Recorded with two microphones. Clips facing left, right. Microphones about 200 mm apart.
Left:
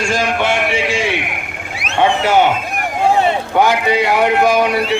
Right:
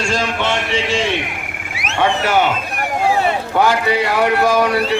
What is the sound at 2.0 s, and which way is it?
Speech, 20° left (ahead or behind).